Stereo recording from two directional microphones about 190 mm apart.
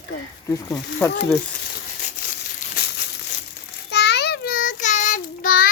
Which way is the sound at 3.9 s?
60° left (ahead or behind).